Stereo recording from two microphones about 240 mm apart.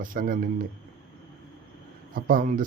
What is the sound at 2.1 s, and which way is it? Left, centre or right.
Speech, right.